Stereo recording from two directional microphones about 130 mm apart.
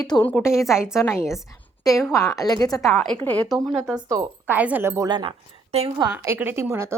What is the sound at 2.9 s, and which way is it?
Speech, 5° left (ahead or behind).